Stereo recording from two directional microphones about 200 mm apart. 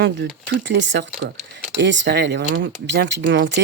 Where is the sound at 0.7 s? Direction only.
65° right (ahead or behind).